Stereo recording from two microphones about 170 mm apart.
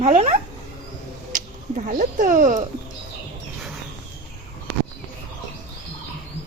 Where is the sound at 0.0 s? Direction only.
40° right (ahead or behind).